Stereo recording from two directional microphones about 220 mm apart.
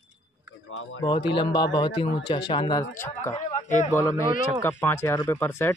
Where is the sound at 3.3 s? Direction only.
35° left (ahead or behind).